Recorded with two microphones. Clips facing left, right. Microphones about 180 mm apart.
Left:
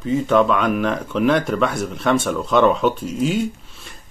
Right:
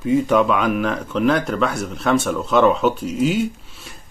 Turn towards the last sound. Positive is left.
turn(degrees=0)  # may be behind; listen again after turning